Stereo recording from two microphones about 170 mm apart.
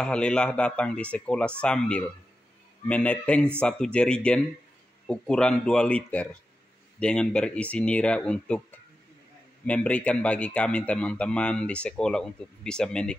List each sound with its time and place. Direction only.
0.0 s speech: 5° left (ahead or behind)
9.7 s speech: 5° left (ahead or behind)